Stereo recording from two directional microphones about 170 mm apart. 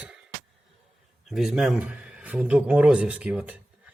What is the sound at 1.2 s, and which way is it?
Speech, centre (ahead or behind).